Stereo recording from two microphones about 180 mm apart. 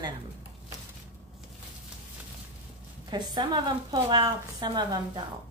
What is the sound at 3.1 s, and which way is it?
A woman's voice, 25° right (ahead or behind).